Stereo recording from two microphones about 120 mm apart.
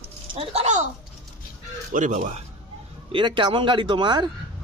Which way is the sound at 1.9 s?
90° right.